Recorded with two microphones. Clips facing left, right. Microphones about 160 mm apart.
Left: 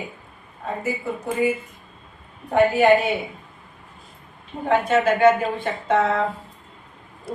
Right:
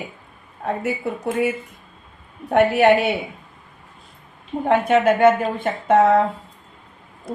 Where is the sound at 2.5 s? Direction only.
70° right (ahead or behind).